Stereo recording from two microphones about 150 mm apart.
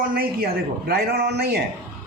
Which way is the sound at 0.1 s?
85° right.